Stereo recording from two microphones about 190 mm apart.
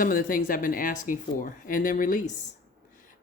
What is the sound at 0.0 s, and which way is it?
Speech, 50° left (ahead or behind).